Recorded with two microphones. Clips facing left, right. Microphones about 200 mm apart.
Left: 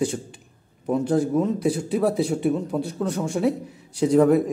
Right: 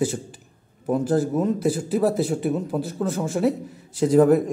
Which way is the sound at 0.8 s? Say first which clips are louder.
Even; 5° right (ahead or behind).